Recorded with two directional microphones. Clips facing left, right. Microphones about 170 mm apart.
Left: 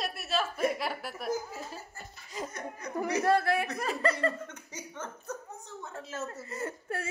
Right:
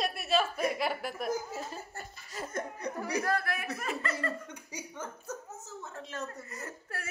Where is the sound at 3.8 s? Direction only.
35° left (ahead or behind).